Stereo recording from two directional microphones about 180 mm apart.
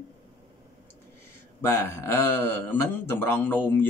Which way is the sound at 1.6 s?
15° left (ahead or behind).